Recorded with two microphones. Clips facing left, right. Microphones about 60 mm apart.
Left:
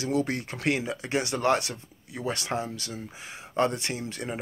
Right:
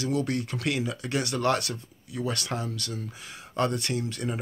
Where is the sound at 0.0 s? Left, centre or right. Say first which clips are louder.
Even; left.